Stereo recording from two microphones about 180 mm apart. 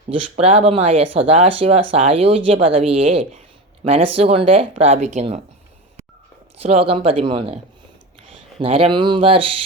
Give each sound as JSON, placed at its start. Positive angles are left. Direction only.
{"t": 0.1, "sound": "speech", "side_deg": -35}
{"t": 6.6, "sound": "speech", "side_deg": -35}